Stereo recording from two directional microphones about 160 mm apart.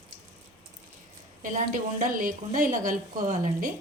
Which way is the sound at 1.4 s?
55° right (ahead or behind).